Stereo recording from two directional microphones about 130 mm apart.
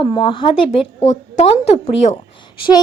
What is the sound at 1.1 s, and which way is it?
A woman's voice, 55° left (ahead or behind).